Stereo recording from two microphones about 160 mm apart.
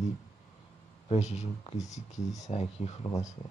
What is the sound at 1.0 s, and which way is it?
Speech, 45° left (ahead or behind).